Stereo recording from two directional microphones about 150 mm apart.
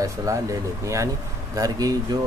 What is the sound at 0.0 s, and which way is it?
A man's voice, 20° right (ahead or behind).